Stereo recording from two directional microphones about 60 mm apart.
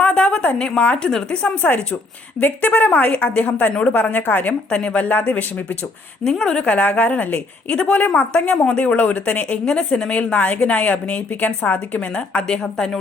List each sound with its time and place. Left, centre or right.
0.1 s a woman's voice: centre
1.6 s a woman's voice: left
4.7 s a woman's voice: centre
6.2 s a woman's voice: centre; by 8.3 s left
8.3 s a woman's voice: centre
9.6 s a woman's voice: centre